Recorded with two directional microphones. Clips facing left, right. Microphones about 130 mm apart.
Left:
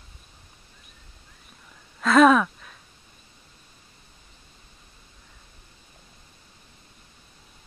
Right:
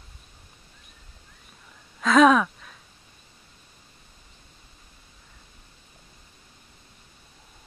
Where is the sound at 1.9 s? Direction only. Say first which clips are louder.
Left 1 dB; centre (ahead or behind).